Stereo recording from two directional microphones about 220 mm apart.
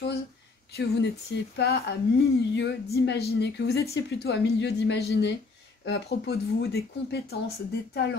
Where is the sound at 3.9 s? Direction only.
50° left (ahead or behind).